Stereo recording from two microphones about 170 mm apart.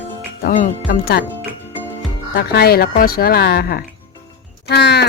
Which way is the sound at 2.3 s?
65° left (ahead or behind).